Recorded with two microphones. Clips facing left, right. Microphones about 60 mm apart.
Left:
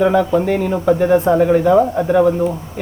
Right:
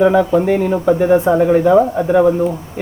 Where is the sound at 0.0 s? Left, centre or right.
Centre.